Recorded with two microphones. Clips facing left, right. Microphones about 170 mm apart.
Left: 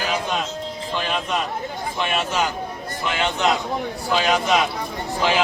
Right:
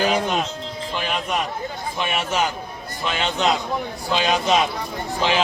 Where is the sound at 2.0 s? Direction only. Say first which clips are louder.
Even; 15° right (ahead or behind).